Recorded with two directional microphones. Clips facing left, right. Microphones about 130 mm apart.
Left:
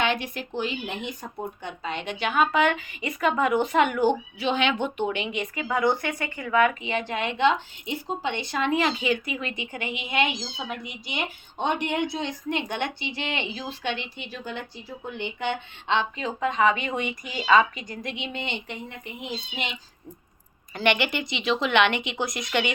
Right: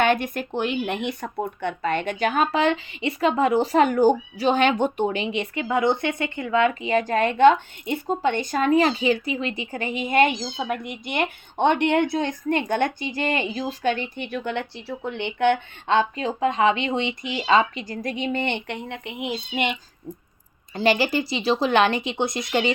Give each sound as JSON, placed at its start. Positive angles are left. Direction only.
{"t": 0.0, "sound": "speech", "side_deg": -50}
{"t": 6.8, "sound": "a woman's voice", "side_deg": -40}
{"t": 20.7, "sound": "speech", "side_deg": -35}